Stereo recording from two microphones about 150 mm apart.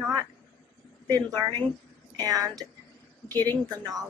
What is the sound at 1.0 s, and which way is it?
A woman's voice, 25° right (ahead or behind).